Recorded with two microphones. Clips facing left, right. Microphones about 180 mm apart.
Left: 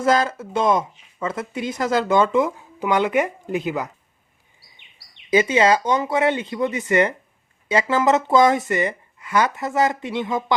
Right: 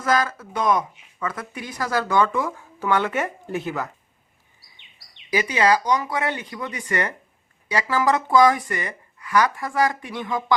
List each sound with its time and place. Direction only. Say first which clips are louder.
0.0 s speech: left 3 dB; 25° left (ahead or behind)
5.3 s speech: left 3 dB; 25° left (ahead or behind)